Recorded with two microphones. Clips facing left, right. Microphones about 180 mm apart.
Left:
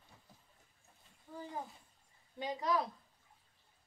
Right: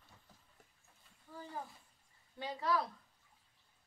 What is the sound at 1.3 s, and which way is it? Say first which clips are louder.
Speech: left 2 dB; 15° left (ahead or behind).